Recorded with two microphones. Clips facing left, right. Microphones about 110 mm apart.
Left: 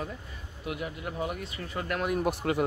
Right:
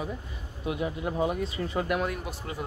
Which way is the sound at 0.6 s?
25° right (ahead or behind).